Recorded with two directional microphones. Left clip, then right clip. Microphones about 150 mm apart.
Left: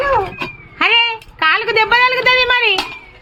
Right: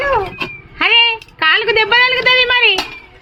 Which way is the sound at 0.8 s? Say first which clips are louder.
Right 2 dB; centre (ahead or behind).